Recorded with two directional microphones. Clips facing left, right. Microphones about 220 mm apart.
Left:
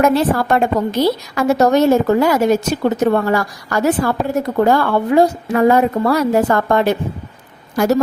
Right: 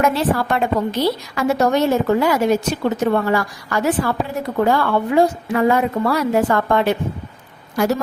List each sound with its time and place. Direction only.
0.0 s a woman's voice: 45° left (ahead or behind)